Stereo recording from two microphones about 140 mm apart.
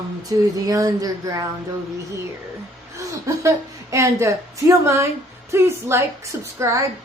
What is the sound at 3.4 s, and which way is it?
A woman's voice, 25° right (ahead or behind).